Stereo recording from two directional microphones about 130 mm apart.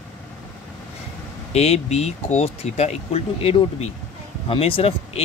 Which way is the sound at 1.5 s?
55° left (ahead or behind).